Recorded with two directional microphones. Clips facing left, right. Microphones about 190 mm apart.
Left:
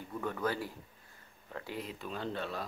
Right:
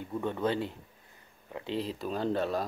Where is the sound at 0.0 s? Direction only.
25° right (ahead or behind).